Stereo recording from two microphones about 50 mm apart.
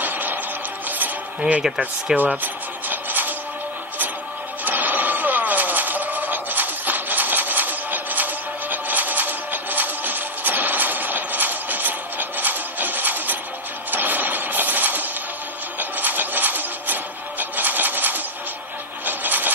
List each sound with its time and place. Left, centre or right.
0.0 s music: right
0.8 s cutlery: right
2.1 s speech: centre
2.4 s a sound: right
4.6 s vehicle: right
13.8 s music: right
15.8 s a sound: right
19.0 s wood: right